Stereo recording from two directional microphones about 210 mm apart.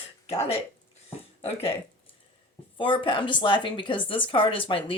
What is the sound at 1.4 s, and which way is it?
Speech, 30° left (ahead or behind).